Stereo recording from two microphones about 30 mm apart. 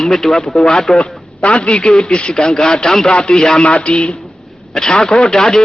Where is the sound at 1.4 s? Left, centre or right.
Left.